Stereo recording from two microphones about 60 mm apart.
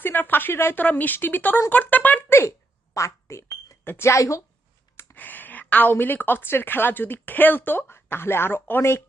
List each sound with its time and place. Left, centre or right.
0.0 s a woman's voice: left
1.7 s a sound: left
2.9 s a woman's voice: left
3.8 s speech: left
5.1 s a woman's voice: left
8.8 s speech: left